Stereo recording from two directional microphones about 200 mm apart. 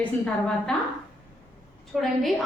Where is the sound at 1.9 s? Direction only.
Centre (ahead or behind).